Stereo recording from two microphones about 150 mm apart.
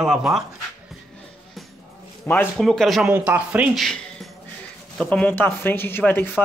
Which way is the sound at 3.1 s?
10° right (ahead or behind).